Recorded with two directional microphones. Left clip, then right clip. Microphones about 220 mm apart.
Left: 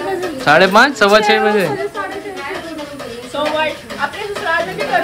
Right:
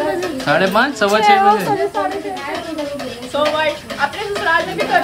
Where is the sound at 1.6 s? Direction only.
45° right (ahead or behind).